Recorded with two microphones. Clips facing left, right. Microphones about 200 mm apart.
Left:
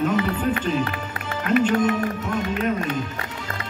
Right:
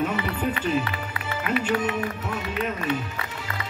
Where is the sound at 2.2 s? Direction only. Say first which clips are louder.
Left 5 dB; 5° right (ahead or behind).